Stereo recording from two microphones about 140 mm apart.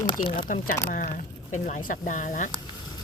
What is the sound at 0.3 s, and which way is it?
Speech, 75° left (ahead or behind).